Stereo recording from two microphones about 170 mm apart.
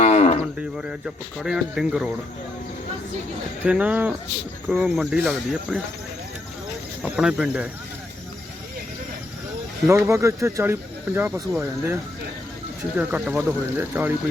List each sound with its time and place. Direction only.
0.0 s cattle: 40° left (ahead or behind)
0.8 s speech: 5° right (ahead or behind)
3.7 s speech: 5° right (ahead or behind)
7.0 s speech: 5° right (ahead or behind)
9.9 s speech: 15° right (ahead or behind)
13.0 s speech: 10° right (ahead or behind)